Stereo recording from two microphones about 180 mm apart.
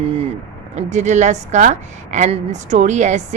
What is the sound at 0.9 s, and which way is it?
A woman's voice, 40° right (ahead or behind).